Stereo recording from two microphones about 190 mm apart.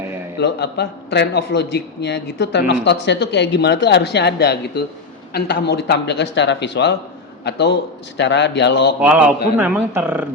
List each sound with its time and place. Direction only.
0.3 s a man's voice: 60° left (ahead or behind)
9.0 s speech: 5° right (ahead or behind)